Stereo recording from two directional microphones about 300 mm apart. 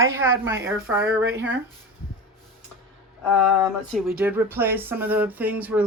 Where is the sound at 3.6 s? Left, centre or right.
Centre.